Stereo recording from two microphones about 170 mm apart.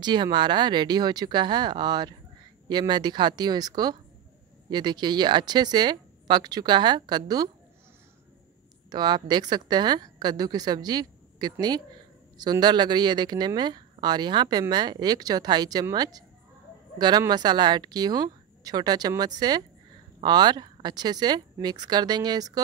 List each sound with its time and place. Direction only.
0.0 s speech: 25° right (ahead or behind)
8.9 s speech: 25° right (ahead or behind)